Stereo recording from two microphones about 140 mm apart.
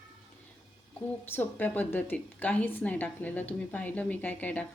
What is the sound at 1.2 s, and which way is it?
A woman's voice, 15° left (ahead or behind).